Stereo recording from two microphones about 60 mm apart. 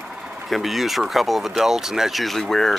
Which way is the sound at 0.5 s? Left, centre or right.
Centre.